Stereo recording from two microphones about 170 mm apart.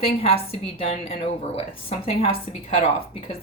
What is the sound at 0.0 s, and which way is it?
Speech, 35° left (ahead or behind).